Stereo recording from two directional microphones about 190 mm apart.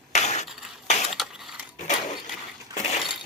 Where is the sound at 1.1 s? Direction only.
Centre (ahead or behind).